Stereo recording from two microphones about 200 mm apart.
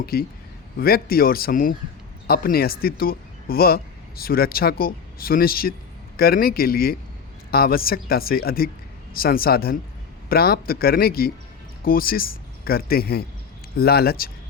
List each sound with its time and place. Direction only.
0.0 s a man's voice: 50° left (ahead or behind)